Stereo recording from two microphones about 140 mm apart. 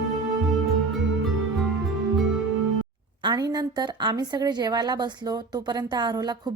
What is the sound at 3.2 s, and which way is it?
A woman's voice, 30° right (ahead or behind).